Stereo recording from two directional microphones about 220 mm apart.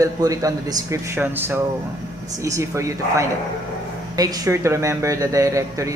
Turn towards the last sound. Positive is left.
turn(degrees=-15)  # may be behind; listen again after turning